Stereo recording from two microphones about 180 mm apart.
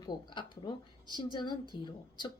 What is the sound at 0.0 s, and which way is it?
A woman's voice, 25° left (ahead or behind).